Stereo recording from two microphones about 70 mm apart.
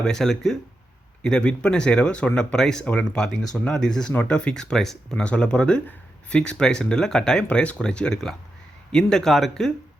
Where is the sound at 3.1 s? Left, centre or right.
Centre.